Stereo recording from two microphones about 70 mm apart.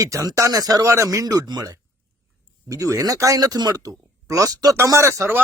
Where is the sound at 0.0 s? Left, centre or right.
Right.